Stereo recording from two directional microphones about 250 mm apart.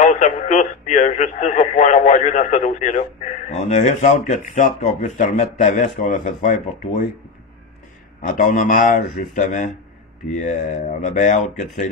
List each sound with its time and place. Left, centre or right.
0.0 s speech: left
8.2 s speech: left